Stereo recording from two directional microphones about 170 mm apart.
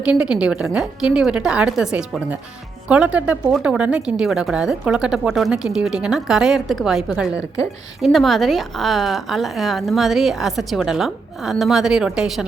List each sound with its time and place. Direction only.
0.0 s speech: 5° right (ahead or behind)